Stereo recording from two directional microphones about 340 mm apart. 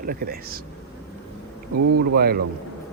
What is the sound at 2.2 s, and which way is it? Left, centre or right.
Speech, right.